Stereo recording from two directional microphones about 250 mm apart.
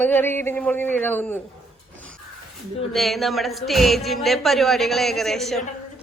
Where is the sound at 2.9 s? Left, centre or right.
Centre.